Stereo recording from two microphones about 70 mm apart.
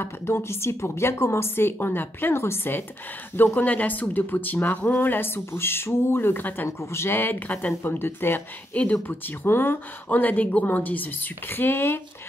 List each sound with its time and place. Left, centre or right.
0.0 s a woman's voice: left
6.8 s a woman's voice: left